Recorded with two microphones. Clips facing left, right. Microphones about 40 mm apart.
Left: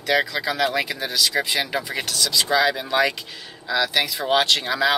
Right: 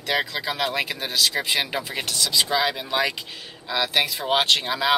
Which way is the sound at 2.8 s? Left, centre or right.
Centre.